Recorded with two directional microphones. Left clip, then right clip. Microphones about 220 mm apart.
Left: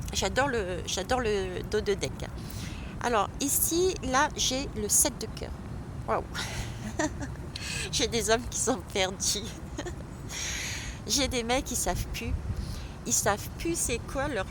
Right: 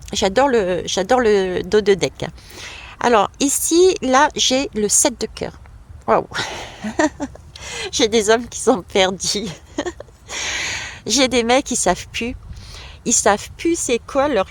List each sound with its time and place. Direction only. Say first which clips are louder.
0.1 s a woman's voice: right 12 dB; 35° right (ahead or behind)